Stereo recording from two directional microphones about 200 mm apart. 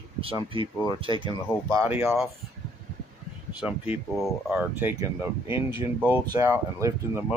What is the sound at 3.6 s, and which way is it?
Speech, 5° right (ahead or behind).